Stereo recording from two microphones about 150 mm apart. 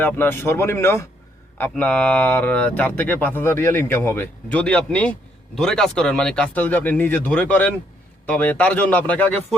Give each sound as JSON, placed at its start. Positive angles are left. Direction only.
{"t": 0.0, "sound": "speech", "side_deg": 15}